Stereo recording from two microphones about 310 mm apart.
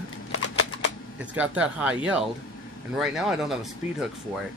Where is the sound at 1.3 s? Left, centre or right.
Centre.